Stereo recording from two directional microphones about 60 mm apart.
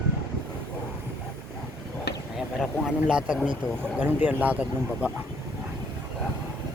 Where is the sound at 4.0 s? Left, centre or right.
Right.